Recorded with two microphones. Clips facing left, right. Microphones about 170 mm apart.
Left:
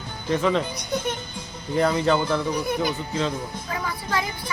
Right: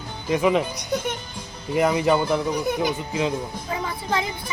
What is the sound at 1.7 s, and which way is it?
Speech, 15° right (ahead or behind).